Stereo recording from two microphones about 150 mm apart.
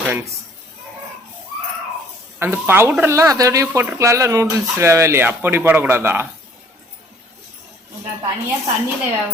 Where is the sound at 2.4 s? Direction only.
15° right (ahead or behind).